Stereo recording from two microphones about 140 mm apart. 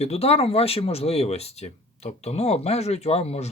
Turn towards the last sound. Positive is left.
turn(degrees=45)  # may be behind; listen again after turning